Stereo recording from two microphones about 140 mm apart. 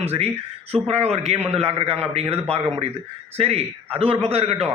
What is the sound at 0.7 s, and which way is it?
A man's voice, 45° right (ahead or behind).